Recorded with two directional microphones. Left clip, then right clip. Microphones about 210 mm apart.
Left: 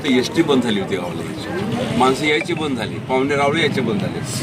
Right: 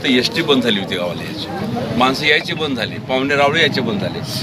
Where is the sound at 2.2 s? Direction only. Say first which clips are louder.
Right 3 dB; 15° right (ahead or behind).